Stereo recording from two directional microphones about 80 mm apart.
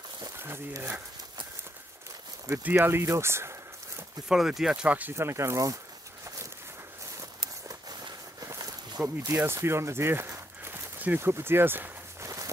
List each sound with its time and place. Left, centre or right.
0.4 s speech: right
2.5 s speech: right
4.3 s speech: centre
4.8 s speech: centre
5.1 s speech: right
7.2 s a sound: right
9.4 s speech: right